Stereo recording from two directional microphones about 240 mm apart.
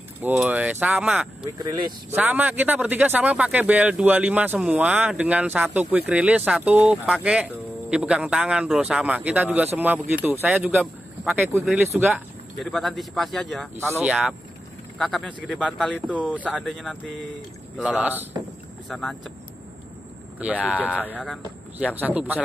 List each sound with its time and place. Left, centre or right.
0.2 s speech: centre
1.4 s speech: centre
2.0 s speech: centre
13.7 s speech: centre
20.3 s speech: centre